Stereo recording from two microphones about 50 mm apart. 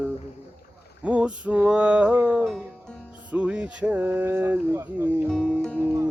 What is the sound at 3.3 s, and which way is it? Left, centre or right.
Music, right.